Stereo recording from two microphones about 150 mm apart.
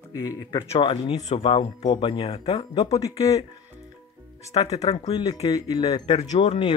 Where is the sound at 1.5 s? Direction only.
30° left (ahead or behind).